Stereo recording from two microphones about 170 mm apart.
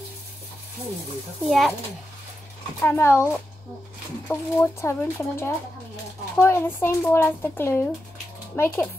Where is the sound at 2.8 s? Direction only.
15° left (ahead or behind).